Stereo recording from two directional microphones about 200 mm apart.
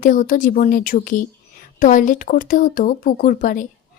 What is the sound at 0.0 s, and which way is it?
Speech, 40° left (ahead or behind).